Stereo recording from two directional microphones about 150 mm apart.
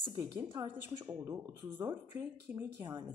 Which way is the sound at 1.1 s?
15° right (ahead or behind).